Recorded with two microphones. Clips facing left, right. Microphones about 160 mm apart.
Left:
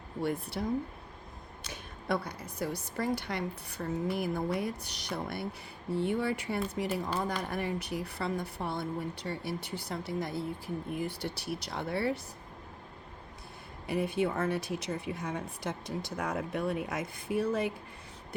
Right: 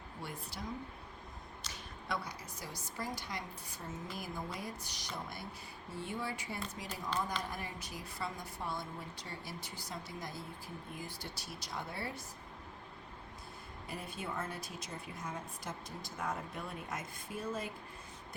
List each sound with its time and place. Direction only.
0.2 s a woman's voice: 60° left (ahead or behind)
1.6 s a woman's voice: 55° left (ahead or behind)
13.8 s speech: 75° left (ahead or behind)